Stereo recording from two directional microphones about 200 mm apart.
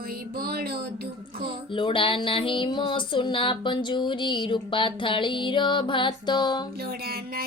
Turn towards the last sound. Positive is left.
turn(degrees=20)  # may be behind; listen again after turning